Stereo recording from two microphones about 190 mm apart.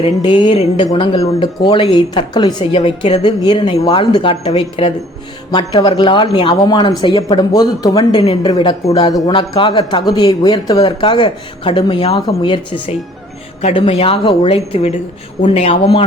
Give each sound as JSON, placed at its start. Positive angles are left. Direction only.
{"t": 0.0, "sound": "speech", "side_deg": 25}
{"t": 8.2, "sound": "speech", "side_deg": 30}